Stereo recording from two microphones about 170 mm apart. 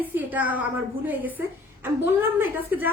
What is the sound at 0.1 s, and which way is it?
A woman's voice, 10° right (ahead or behind).